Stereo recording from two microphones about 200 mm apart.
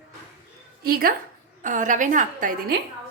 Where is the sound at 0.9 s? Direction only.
50° right (ahead or behind).